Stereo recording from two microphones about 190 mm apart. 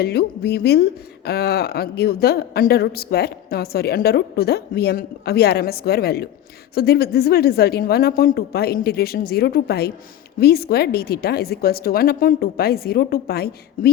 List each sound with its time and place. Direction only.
0.0 s a woman's voice: 55° left (ahead or behind)